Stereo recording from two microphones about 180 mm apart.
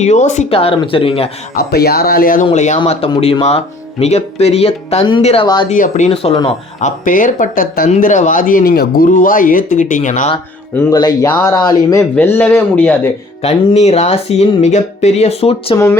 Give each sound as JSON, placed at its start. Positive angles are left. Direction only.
{"t": 0.0, "sound": "speech", "side_deg": 40}
{"t": 1.5, "sound": "speech", "side_deg": 60}
{"t": 5.6, "sound": "speech", "side_deg": 45}
{"t": 6.1, "sound": "speech", "side_deg": 30}
{"t": 6.8, "sound": "speech", "side_deg": 45}
{"t": 10.8, "sound": "speech", "side_deg": 20}
{"t": 12.1, "sound": "speech", "side_deg": 10}
{"t": 13.4, "sound": "speech", "side_deg": 35}